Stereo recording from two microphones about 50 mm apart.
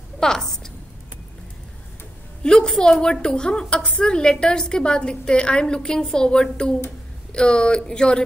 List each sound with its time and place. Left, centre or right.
0.2 s a woman's voice: centre
2.4 s a woman's voice: centre